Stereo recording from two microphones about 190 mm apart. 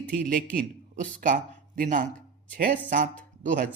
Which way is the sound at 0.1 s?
45° right (ahead or behind).